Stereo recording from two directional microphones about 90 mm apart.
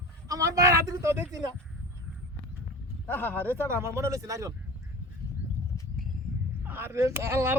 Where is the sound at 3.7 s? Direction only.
30° right (ahead or behind).